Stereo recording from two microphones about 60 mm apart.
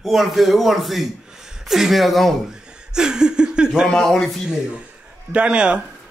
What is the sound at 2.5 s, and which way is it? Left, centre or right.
Speech, centre.